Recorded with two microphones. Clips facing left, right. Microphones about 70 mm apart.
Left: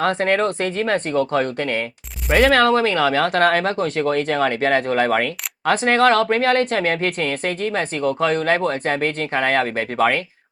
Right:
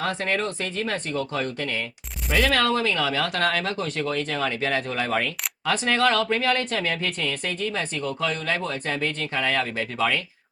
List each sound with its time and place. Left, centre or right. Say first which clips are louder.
0.0 s speech: left 7 dB; left